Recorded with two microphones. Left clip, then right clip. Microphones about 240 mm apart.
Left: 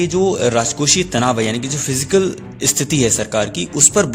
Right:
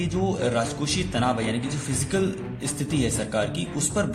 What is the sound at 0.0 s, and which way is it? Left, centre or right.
A man's voice, left.